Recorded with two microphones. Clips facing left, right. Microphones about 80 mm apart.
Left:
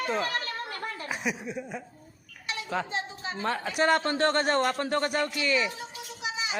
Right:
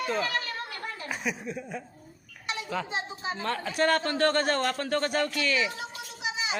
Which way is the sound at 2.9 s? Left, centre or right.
Centre.